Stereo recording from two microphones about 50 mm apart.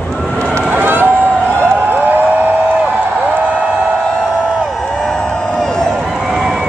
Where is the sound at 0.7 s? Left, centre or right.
Right.